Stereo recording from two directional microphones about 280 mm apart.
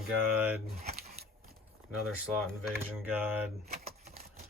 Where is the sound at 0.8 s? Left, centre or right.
Right.